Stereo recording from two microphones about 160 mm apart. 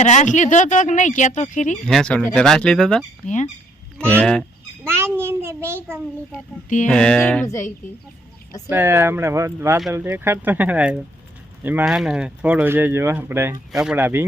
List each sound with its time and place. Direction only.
0.0 s speech: 45° left (ahead or behind)
1.9 s speech: 5° left (ahead or behind)
3.2 s speech: 50° left (ahead or behind)
4.1 s fowl: 5° left (ahead or behind)
4.9 s a sound: 15° right (ahead or behind)
6.8 s speech: 5° left (ahead or behind)
8.7 s speech: 15° right (ahead or behind)